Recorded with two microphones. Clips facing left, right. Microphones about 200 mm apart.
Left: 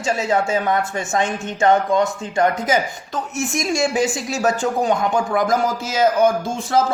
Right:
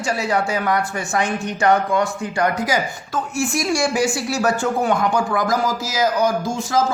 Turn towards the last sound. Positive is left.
turn(degrees=30)  # may be behind; listen again after turning